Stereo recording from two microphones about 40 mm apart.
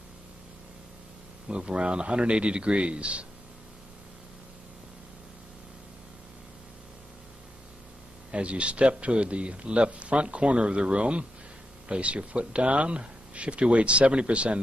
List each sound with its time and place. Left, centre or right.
1.5 s a man's voice: right
8.3 s a man's voice: right